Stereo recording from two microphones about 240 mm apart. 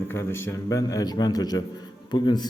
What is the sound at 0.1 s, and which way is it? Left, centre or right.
Speech, centre.